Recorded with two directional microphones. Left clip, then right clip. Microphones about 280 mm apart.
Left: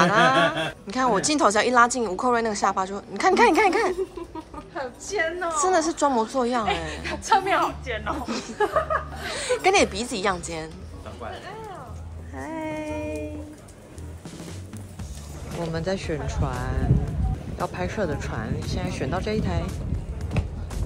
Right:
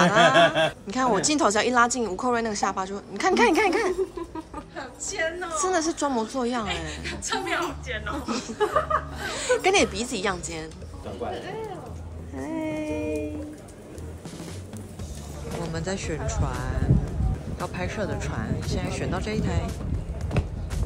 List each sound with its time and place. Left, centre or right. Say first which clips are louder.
0.0 s speech: right 1 dB; centre
4.7 s a woman's voice: left 4 dB; centre
5.7 s speech: left 4 dB; centre
6.9 s a woman's voice: left 8 dB; centre
8.3 s speech: right 1 dB; centre
12.4 s a sound: right 1 dB; centre
15.7 s speech: left 5 dB; centre
20.2 s music: right 2 dB; centre